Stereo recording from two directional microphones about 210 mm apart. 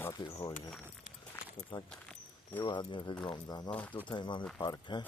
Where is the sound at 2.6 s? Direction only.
20° left (ahead or behind).